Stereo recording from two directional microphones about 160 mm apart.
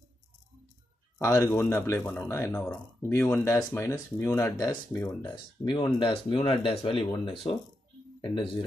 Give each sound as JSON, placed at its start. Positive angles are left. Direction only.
{"t": 1.1, "sound": "speech", "side_deg": 15}
{"t": 8.2, "sound": "speech", "side_deg": 30}